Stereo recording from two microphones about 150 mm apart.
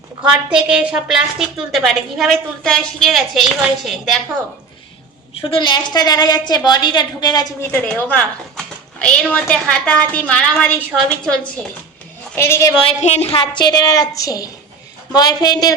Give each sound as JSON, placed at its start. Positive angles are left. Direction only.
{"t": 0.2, "sound": "a woman's voice", "side_deg": -5}
{"t": 5.4, "sound": "a woman's voice", "side_deg": 35}
{"t": 7.6, "sound": "speech", "side_deg": 10}
{"t": 12.4, "sound": "speech", "side_deg": 15}
{"t": 12.8, "sound": "a woman's voice", "side_deg": 45}
{"t": 13.6, "sound": "a woman's voice", "side_deg": 25}